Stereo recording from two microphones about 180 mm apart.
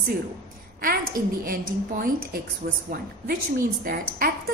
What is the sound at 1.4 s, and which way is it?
A woman's voice, 50° right (ahead or behind).